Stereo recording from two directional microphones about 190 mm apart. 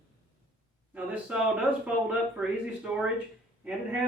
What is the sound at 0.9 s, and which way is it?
Speech, 5° right (ahead or behind).